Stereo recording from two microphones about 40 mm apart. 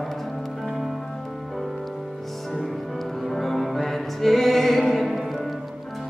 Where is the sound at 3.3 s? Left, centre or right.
Centre.